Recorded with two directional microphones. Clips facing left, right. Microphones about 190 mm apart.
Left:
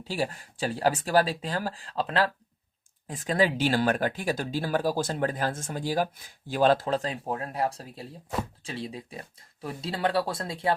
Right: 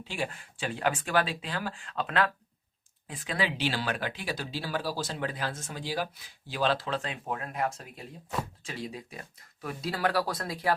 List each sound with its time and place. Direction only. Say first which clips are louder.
0.0 s speech: left 4 dB; 40° left (ahead or behind)
3.1 s speech: left 7 dB; 45° left (ahead or behind); by 10.8 s 25° left (ahead or behind)